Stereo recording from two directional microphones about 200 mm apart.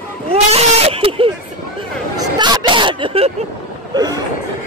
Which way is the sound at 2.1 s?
20° right (ahead or behind).